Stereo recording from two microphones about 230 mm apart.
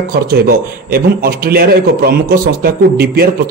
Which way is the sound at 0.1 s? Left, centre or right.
Right.